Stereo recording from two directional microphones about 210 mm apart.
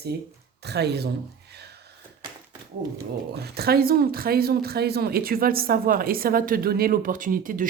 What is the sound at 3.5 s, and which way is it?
Speech, 45° right (ahead or behind).